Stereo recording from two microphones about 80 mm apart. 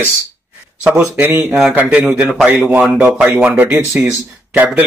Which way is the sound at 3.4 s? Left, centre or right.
Centre.